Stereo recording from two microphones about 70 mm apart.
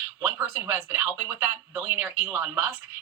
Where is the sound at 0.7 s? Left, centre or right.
Right.